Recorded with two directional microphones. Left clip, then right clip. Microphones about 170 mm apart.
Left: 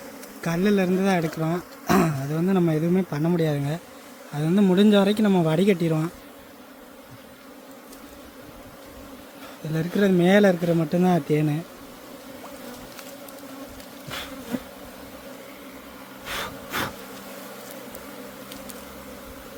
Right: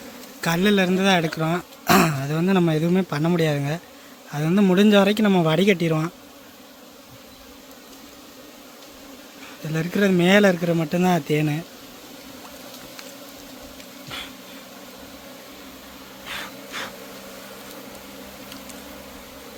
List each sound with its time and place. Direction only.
0.4 s speech: centre (ahead or behind)
9.7 s speech: centre (ahead or behind)
16.2 s a sound: 70° left (ahead or behind)